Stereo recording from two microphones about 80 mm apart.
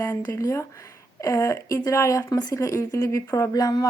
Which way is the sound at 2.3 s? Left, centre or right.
Left.